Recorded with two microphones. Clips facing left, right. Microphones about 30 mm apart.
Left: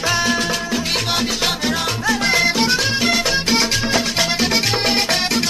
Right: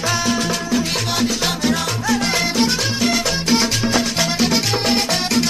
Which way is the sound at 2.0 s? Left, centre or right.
Centre.